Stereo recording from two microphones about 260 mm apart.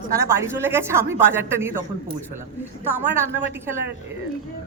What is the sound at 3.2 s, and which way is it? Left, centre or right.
Speech, centre.